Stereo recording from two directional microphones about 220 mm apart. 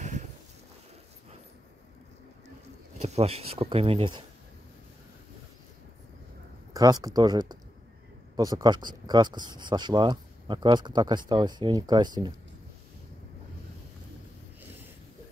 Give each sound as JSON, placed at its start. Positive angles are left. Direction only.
{"t": 0.0, "sound": "a sound", "side_deg": -30}
{"t": 3.0, "sound": "speech", "side_deg": -30}
{"t": 6.7, "sound": "speech", "side_deg": -15}